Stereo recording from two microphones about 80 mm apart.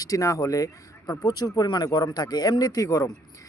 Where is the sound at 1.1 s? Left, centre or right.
Left.